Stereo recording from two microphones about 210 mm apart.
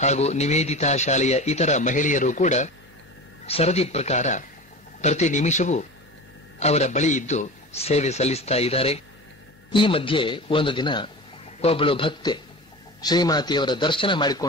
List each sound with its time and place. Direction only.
0.0 s speech: 30° left (ahead or behind)